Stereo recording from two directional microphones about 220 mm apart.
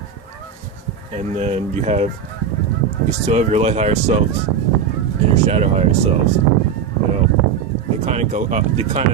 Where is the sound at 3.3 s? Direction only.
30° right (ahead or behind).